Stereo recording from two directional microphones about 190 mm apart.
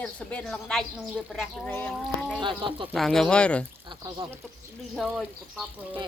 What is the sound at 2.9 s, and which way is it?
Speech, centre (ahead or behind).